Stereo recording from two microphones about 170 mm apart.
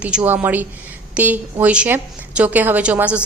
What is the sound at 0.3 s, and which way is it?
A woman's voice, 10° right (ahead or behind).